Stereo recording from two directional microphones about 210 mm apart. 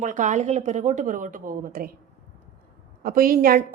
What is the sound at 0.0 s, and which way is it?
Speech, 35° right (ahead or behind).